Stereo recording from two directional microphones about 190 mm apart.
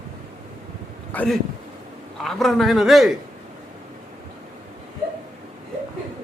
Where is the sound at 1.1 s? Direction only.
10° left (ahead or behind).